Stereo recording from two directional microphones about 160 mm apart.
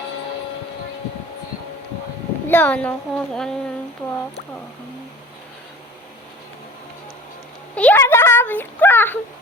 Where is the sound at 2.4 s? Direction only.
10° left (ahead or behind).